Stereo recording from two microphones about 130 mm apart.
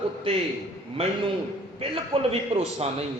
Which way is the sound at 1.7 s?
50° right (ahead or behind).